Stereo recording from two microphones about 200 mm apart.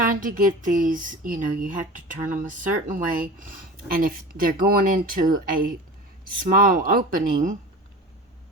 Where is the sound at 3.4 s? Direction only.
45° right (ahead or behind).